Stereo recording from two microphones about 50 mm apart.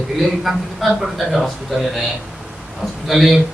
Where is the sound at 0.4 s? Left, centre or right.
Centre.